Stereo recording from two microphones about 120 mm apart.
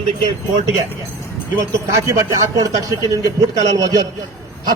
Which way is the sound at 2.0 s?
30° right (ahead or behind).